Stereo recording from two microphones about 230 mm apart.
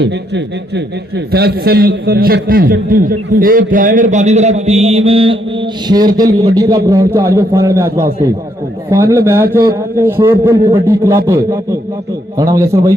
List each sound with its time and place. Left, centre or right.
1.3 s a man's voice: right; by 10.5 s centre
10.5 s a man's voice: right
10.8 s a man's voice: centre
12.4 s a man's voice: centre